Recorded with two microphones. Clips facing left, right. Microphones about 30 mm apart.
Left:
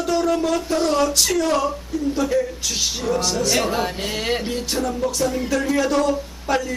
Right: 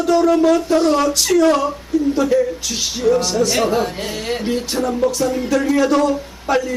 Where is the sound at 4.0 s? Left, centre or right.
Centre.